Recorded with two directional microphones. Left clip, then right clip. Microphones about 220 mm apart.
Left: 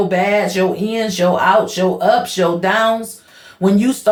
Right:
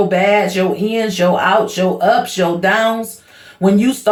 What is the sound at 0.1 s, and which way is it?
Speech, 25° left (ahead or behind).